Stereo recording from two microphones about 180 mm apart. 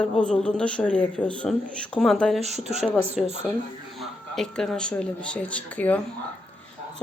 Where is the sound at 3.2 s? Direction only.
Centre (ahead or behind).